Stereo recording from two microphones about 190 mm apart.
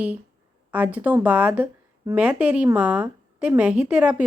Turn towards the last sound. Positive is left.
turn(degrees=-5)  # may be behind; listen again after turning